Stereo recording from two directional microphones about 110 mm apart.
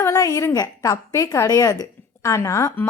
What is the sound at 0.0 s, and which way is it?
A woman's voice, 30° left (ahead or behind).